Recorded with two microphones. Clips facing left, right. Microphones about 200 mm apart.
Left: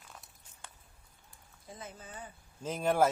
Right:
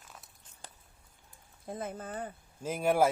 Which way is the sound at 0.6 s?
35° right (ahead or behind).